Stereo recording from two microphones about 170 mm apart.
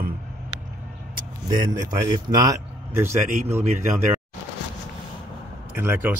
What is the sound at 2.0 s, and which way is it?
Speech, 25° right (ahead or behind).